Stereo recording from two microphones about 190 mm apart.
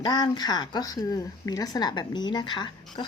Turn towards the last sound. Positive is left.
turn(degrees=25)  # may be behind; listen again after turning